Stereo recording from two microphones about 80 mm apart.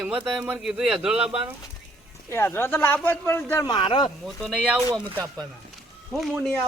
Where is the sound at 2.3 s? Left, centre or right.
Left.